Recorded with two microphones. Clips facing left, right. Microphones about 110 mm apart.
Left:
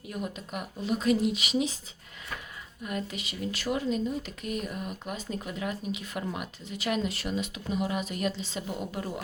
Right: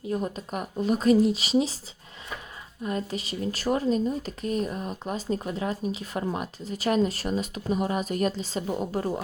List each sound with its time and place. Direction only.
0.1 s speech: 35° right (ahead or behind)
2.8 s speech: 35° right (ahead or behind)